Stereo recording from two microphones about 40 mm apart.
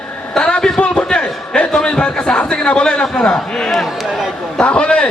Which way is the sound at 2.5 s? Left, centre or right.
Left.